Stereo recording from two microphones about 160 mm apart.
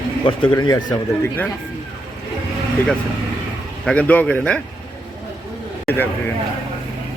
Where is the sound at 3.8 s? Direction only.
10° left (ahead or behind).